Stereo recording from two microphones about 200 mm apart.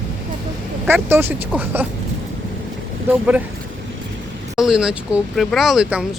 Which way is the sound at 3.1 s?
5° right (ahead or behind).